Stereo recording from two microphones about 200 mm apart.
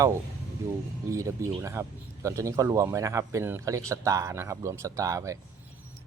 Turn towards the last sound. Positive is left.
turn(degrees=-15)  # may be behind; listen again after turning